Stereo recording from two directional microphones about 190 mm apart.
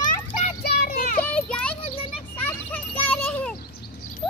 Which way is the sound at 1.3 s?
5° left (ahead or behind).